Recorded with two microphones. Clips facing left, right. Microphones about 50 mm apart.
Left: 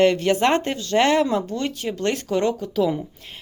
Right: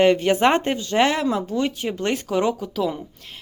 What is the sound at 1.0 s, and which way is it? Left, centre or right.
Speech, centre.